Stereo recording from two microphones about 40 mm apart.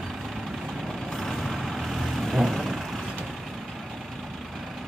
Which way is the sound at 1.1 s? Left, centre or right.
Centre.